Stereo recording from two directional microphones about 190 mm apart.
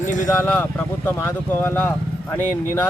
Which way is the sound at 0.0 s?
40° left (ahead or behind).